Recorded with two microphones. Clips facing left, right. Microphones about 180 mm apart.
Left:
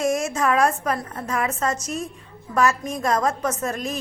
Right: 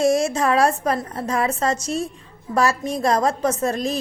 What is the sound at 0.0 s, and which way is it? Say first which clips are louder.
A woman's voice: right 4 dB; 30° right (ahead or behind).